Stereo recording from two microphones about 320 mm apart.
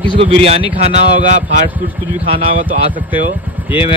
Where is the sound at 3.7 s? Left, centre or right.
Centre.